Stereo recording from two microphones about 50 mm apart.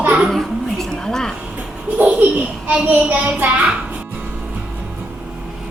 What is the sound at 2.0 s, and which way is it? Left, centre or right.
A child's voice, right.